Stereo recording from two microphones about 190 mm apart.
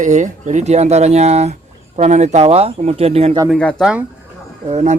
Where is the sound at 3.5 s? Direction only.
5° left (ahead or behind).